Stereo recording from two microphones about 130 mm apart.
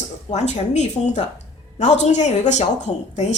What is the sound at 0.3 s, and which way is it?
A woman's voice, 60° left (ahead or behind).